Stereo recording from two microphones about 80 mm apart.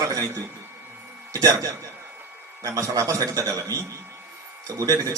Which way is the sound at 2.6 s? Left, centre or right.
Right.